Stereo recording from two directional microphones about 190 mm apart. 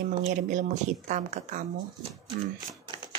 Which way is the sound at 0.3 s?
40° right (ahead or behind).